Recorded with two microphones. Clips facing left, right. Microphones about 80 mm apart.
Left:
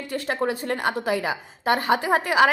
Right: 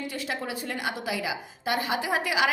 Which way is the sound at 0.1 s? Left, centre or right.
Left.